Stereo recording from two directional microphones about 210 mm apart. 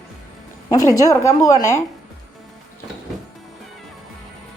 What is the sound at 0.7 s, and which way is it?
A woman's voice, 15° left (ahead or behind).